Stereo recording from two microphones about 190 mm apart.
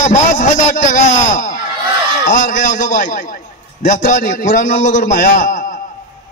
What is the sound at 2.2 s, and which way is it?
Speech, 45° left (ahead or behind).